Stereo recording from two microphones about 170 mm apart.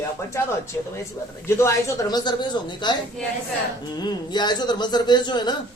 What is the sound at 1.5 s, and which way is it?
A man's voice, 15° left (ahead or behind).